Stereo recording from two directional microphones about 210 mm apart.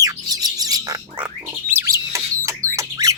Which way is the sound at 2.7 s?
15° right (ahead or behind).